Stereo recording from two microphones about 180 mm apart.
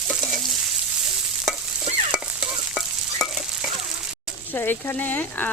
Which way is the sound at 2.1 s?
5° right (ahead or behind).